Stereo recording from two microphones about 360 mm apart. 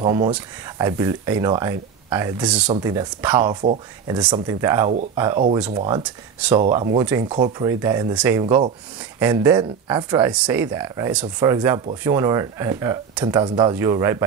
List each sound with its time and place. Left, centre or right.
0.0 s speech: centre